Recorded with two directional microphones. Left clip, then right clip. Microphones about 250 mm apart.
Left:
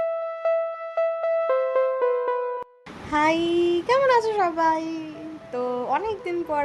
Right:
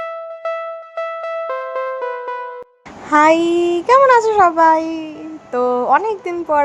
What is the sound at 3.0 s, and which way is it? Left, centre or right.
A woman's voice, centre.